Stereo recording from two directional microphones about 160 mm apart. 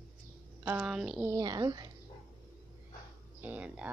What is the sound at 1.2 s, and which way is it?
Speech, 25° right (ahead or behind).